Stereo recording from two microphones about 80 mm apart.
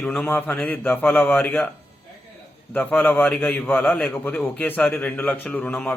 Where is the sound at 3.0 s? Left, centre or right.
Centre.